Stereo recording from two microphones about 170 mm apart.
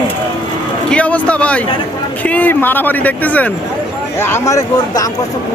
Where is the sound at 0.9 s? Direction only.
5° left (ahead or behind).